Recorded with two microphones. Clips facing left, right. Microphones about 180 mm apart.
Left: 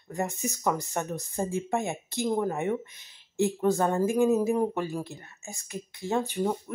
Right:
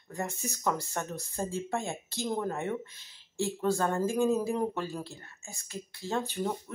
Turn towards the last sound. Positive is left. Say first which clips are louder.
# left 4 dB
turn(degrees=15)  # may be behind; listen again after turning